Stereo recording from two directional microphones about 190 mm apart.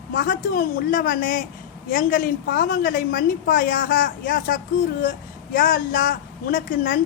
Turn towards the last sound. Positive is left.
turn(degrees=45)  # may be behind; listen again after turning